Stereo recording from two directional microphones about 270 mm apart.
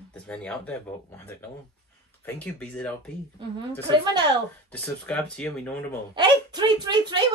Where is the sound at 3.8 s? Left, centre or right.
Centre.